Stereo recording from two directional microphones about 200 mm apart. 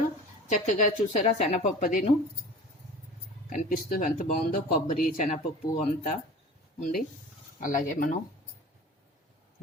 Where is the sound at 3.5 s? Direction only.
45° left (ahead or behind).